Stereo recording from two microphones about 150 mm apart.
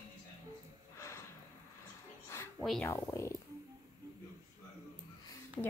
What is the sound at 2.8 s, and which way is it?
Speech, 20° left (ahead or behind).